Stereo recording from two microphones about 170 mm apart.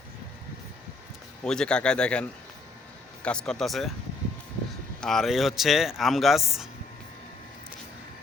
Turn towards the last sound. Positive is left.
turn(degrees=0)  # may be behind; listen again after turning